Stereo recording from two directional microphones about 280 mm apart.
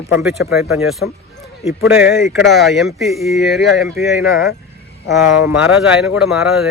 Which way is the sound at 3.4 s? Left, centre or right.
Left.